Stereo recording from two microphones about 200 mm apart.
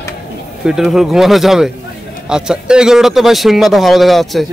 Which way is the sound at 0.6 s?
Centre (ahead or behind).